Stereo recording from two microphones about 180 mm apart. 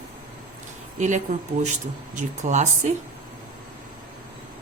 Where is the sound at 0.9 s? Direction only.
40° right (ahead or behind).